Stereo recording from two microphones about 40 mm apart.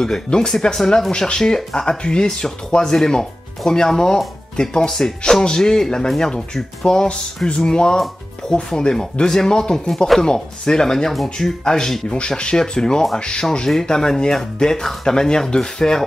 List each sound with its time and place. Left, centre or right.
0.0 s speech: centre